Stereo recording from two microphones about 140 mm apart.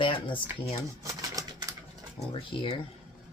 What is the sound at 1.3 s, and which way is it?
Typewriter, 25° right (ahead or behind).